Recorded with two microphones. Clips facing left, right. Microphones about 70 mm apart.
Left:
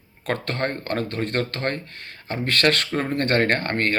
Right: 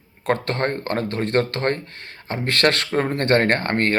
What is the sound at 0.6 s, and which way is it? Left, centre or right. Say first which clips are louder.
Speech: right 2 dB; right.